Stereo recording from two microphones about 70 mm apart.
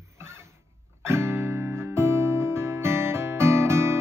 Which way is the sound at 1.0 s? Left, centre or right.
Right.